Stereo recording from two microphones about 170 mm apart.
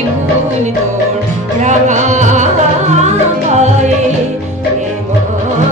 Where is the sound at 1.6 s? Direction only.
45° right (ahead or behind).